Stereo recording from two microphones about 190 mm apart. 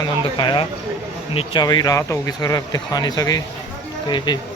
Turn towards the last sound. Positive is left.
turn(degrees=25)  # may be behind; listen again after turning